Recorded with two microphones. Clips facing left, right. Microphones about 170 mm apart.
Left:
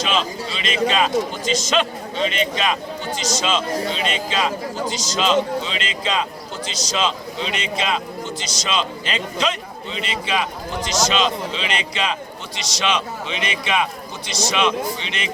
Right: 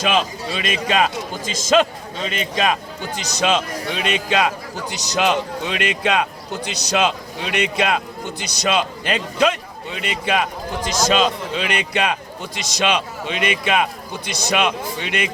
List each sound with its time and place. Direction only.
0.0 s a man's voice: 55° right (ahead or behind)
2.3 s a man's voice: 50° right (ahead or behind)
3.2 s a man's voice: 60° right (ahead or behind)